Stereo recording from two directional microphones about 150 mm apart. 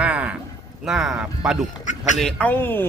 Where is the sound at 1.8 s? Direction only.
55° left (ahead or behind).